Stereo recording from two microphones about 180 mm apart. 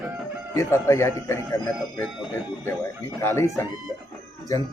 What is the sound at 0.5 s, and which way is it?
Speech, 15° left (ahead or behind).